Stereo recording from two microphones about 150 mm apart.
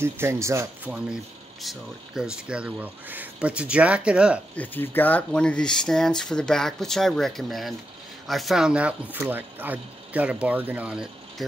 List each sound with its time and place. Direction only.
0.0 s speech: 15° right (ahead or behind)
0.9 s speech: 5° right (ahead or behind)
4.6 s speech: 15° left (ahead or behind); by 11.4 s 5° right (ahead or behind)